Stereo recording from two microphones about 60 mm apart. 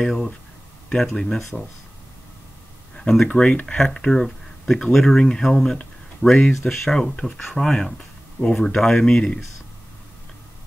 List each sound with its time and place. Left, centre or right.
1.1 s speech: centre
3.0 s speech: centre